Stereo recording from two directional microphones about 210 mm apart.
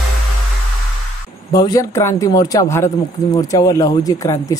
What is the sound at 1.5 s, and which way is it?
Speech, 15° left (ahead or behind).